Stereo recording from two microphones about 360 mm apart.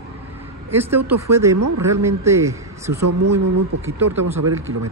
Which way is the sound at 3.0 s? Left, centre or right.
Right.